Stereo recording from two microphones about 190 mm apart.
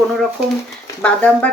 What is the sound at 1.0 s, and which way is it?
Speech, 5° left (ahead or behind).